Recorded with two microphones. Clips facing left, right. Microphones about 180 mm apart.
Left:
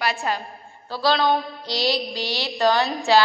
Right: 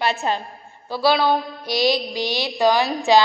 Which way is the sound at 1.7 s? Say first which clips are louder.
Right 4 dB; 15° right (ahead or behind).